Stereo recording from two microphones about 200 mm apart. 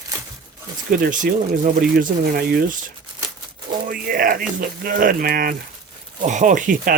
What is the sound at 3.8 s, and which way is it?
Speech, 45° right (ahead or behind).